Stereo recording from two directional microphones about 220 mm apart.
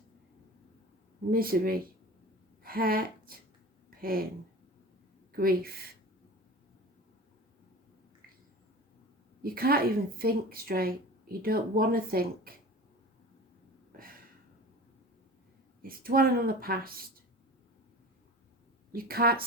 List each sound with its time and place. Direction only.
1.3 s speech: 40° right (ahead or behind)
3.8 s a sound: 40° right (ahead or behind)
5.4 s speech: 45° right (ahead or behind)
9.4 s speech: 45° right (ahead or behind)
15.8 s speech: 40° right (ahead or behind)
18.9 s speech: 45° right (ahead or behind)